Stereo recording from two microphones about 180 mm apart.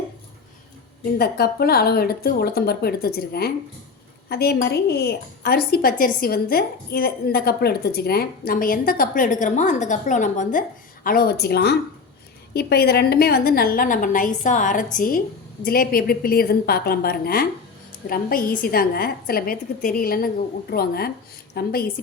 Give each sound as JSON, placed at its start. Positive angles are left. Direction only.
{"t": 1.2, "sound": "a woman's voice", "side_deg": 60}